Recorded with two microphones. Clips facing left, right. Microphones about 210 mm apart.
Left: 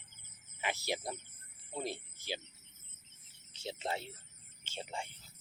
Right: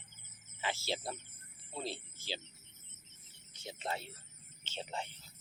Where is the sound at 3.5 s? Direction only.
30° left (ahead or behind).